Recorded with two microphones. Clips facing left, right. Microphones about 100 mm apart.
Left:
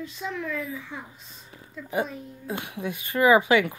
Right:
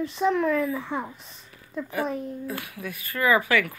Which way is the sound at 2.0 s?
55° right (ahead or behind).